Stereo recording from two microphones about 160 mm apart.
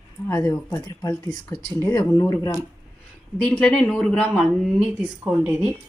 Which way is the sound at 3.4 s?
5° left (ahead or behind).